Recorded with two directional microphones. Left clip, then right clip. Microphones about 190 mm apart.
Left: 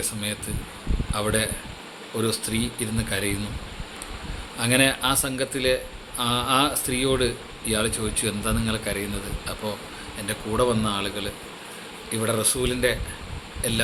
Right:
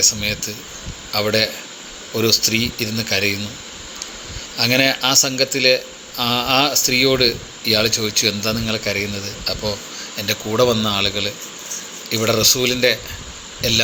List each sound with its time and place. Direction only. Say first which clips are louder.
0.0 s a man's voice: right 12 dB; 15° right (ahead or behind)
4.5 s a man's voice: right 5 dB; 20° right (ahead or behind)